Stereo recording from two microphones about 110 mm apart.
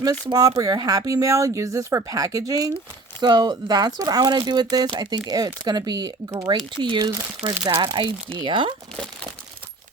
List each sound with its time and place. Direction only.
0.0 s speech: 35° right (ahead or behind)
6.8 s speech: 45° right (ahead or behind)
7.1 s speech: 35° right (ahead or behind); by 8.7 s 50° right (ahead or behind)